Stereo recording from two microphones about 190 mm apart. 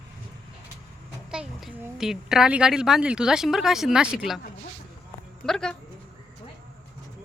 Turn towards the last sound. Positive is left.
turn(degrees=5)  # may be behind; listen again after turning